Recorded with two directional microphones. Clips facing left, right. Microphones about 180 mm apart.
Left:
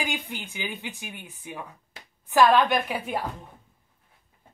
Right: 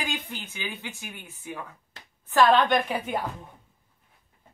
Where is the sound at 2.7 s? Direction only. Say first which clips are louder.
Right 2 dB; 5° left (ahead or behind).